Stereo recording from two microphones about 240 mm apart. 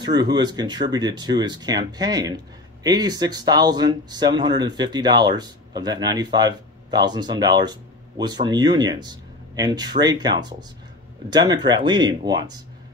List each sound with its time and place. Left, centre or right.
0.0 s speech: centre